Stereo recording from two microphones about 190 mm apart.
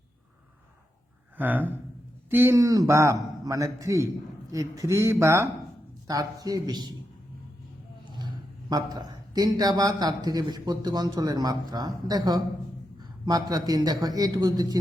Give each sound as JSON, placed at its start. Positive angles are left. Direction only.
{"t": 1.4, "sound": "a man's voice", "side_deg": -10}
{"t": 8.7, "sound": "a man's voice", "side_deg": -20}